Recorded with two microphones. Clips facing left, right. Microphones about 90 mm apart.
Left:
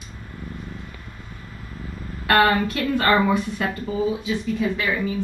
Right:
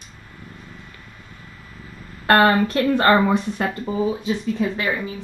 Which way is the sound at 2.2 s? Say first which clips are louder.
Right 2 dB; 35° right (ahead or behind).